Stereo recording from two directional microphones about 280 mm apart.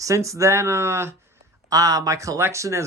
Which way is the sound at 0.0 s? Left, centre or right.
Centre.